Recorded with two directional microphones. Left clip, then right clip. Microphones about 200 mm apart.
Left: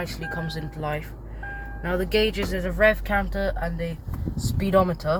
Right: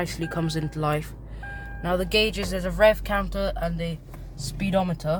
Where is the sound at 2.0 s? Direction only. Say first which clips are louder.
Left 1 dB; 25° right (ahead or behind).